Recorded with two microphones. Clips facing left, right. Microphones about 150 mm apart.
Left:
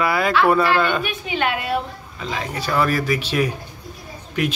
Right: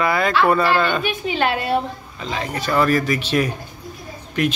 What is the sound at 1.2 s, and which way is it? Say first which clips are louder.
Speech: right 3 dB; 35° right (ahead or behind).